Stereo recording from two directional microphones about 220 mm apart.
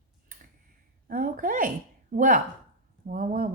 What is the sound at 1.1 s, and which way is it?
A woman's voice, 40° right (ahead or behind).